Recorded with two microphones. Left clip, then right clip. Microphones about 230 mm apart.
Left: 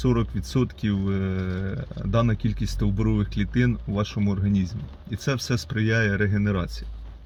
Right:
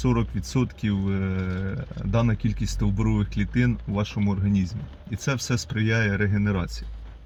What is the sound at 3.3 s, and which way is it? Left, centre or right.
Speech, centre.